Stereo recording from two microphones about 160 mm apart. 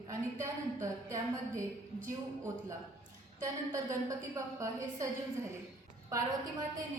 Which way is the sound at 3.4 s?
20° right (ahead or behind).